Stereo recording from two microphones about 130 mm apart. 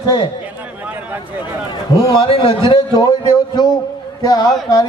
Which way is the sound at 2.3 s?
35° left (ahead or behind).